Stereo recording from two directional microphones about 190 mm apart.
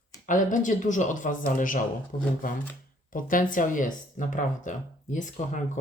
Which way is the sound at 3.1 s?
45° left (ahead or behind).